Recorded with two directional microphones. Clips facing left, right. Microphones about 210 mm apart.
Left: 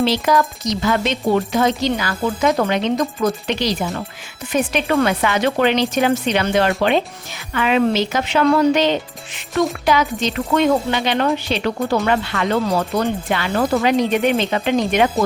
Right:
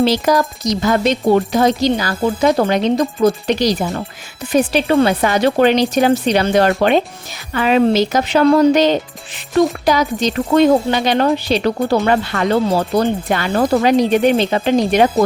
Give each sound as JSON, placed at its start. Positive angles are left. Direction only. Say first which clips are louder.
{"t": 0.0, "sound": "speech", "louder": "right 3 dB", "side_deg": -40}
{"t": 13.3, "sound": "speech", "louder": "right 3 dB", "side_deg": -40}